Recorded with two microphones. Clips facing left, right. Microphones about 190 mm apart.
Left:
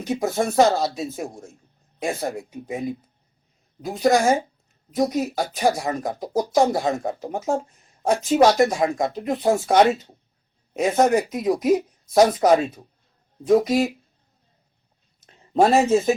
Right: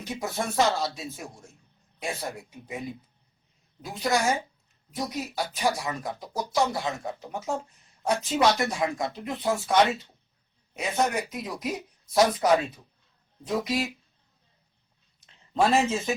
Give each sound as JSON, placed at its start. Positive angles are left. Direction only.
{"t": 0.0, "sound": "speech", "side_deg": 45}
{"t": 3.8, "sound": "speech", "side_deg": 45}
{"t": 15.3, "sound": "speech", "side_deg": 45}